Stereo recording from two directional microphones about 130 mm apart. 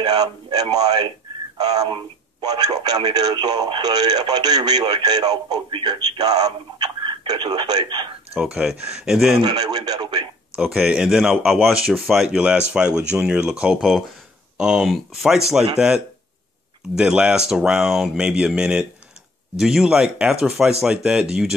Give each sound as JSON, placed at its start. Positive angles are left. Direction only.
{"t": 0.0, "sound": "speech", "side_deg": -35}
{"t": 8.4, "sound": "speech", "side_deg": -5}
{"t": 9.4, "sound": "speech", "side_deg": -35}
{"t": 10.6, "sound": "speech", "side_deg": -5}
{"t": 16.9, "sound": "speech", "side_deg": -5}